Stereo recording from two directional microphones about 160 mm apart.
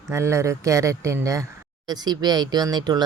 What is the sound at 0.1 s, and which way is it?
Speech, 15° right (ahead or behind).